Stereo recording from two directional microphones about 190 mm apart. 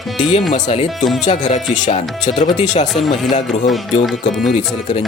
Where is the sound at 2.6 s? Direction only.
35° left (ahead or behind).